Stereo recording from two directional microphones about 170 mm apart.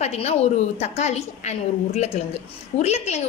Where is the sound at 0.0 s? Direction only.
40° left (ahead or behind).